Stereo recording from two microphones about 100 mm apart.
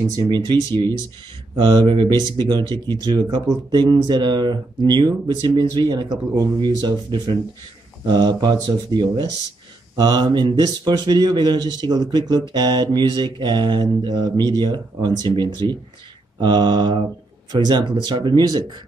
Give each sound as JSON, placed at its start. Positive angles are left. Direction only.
{"t": 0.3, "sound": "speech", "side_deg": -50}